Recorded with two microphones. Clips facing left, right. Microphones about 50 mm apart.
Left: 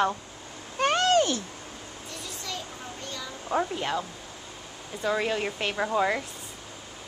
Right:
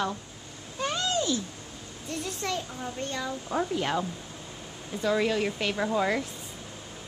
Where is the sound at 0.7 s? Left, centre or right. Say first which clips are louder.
Left 7 dB; left.